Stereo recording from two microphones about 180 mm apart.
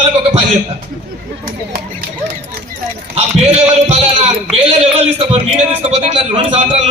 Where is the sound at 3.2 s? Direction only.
35° right (ahead or behind).